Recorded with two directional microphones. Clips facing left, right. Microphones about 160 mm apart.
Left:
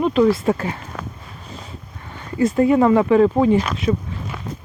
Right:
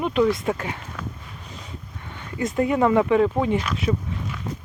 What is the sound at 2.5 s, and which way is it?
Speech, 30° left (ahead or behind).